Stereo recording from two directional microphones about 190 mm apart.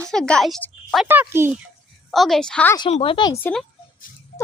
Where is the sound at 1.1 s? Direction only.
10° right (ahead or behind).